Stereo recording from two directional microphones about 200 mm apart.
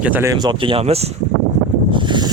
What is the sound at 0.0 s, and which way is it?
Speech, 10° right (ahead or behind).